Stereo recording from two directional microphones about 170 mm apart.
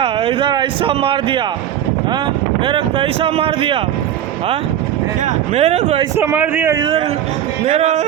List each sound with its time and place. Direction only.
0.0 s a man's voice: 35° right (ahead or behind)
2.6 s speech: 30° right (ahead or behind)
5.2 s speech: 40° right (ahead or behind)
6.1 s a man's voice: 10° right (ahead or behind)
6.7 s a man's voice: 30° right (ahead or behind)
7.7 s speech: 40° right (ahead or behind)